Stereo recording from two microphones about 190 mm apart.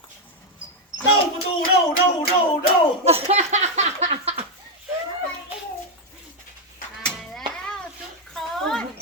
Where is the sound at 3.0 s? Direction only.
35° right (ahead or behind).